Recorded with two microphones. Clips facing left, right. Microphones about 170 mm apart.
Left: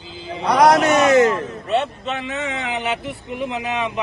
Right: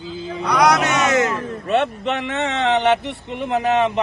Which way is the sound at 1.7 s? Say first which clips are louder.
Right 2 dB; 65° right (ahead or behind).